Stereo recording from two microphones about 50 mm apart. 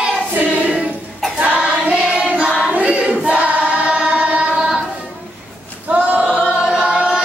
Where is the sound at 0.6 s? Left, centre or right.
Right.